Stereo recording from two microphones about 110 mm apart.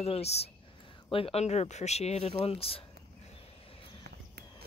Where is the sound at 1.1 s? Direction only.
55° left (ahead or behind).